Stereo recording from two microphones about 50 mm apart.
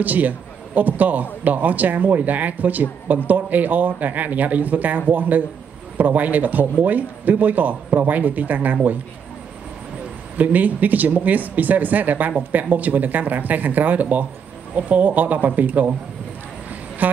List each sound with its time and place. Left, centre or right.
0.0 s speech: right
10.3 s speech: right
17.0 s speech: right